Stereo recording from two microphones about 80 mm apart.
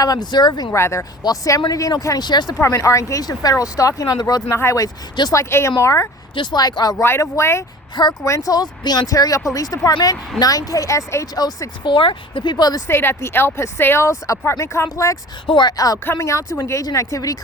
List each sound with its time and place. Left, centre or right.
0.0 s speech: left
0.7 s speech: left
1.2 s speech: left
2.6 s speech: left
4.4 s speech: left
6.3 s speech: left
7.0 s speech: left
9.0 s speech: left
11.3 s speech: left
11.8 s speech: left
12.9 s speech: left
15.4 s speech: left
15.7 s speech: left